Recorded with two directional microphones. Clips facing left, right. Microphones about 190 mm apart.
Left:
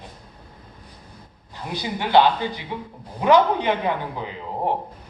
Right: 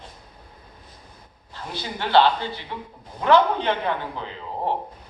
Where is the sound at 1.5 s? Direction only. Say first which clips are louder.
Left 4 dB; 15° left (ahead or behind).